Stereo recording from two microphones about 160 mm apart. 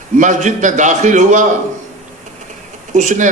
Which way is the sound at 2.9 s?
50° right (ahead or behind).